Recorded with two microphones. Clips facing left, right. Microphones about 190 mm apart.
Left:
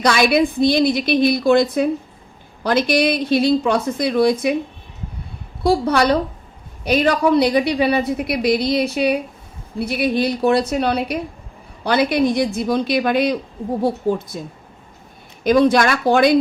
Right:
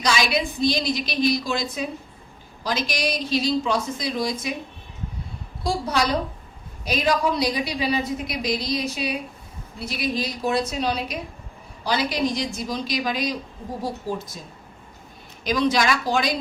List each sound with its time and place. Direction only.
0.0 s a woman's voice: 55° left (ahead or behind)
5.6 s a woman's voice: 60° left (ahead or behind)
15.4 s a woman's voice: 55° left (ahead or behind)